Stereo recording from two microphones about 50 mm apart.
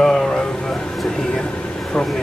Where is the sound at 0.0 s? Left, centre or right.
Centre.